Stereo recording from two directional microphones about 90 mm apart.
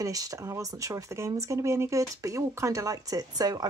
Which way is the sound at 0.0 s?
40° right (ahead or behind).